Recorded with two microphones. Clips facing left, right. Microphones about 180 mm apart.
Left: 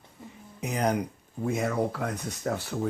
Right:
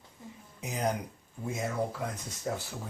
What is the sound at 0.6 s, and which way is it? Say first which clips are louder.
Speech: left 5 dB; 65° left (ahead or behind).